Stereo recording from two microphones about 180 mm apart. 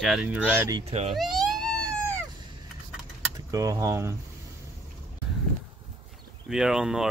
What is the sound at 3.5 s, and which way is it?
Speech, 20° right (ahead or behind).